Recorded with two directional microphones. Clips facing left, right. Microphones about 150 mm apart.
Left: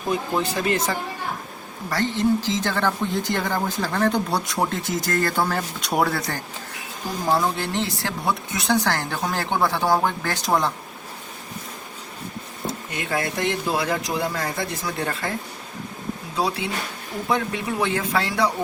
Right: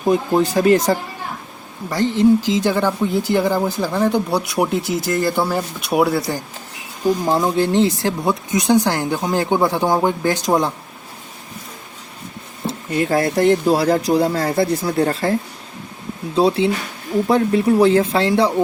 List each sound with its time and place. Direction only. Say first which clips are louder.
0.1 s speech: right 8 dB; 45° right (ahead or behind)
1.9 s speech: right 7 dB; 15° right (ahead or behind)
7.3 s speech: right 1 dB; 20° right (ahead or behind)
12.6 s speech: right 10 dB; 35° right (ahead or behind)